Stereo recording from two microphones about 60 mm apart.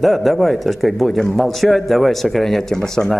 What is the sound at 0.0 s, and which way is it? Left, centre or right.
A man's voice, centre.